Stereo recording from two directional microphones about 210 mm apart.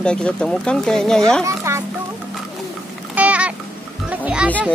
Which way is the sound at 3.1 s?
5° right (ahead or behind).